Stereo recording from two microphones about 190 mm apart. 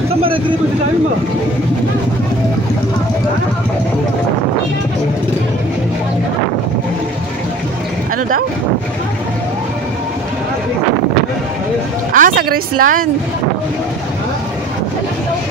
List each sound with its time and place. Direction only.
12.1 s speech: 45° right (ahead or behind)